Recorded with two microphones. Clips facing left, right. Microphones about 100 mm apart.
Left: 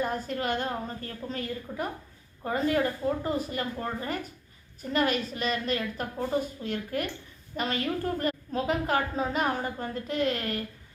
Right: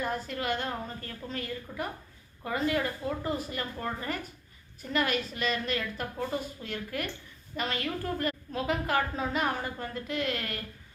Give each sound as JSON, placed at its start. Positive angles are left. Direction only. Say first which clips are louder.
{"t": 0.0, "sound": "a woman's voice", "louder": "left 3 dB", "side_deg": 40}
{"t": 4.8, "sound": "a woman's voice", "louder": "left 3 dB", "side_deg": 40}